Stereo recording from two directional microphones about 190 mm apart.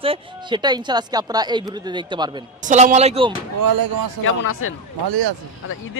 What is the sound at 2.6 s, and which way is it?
Speech, 35° right (ahead or behind).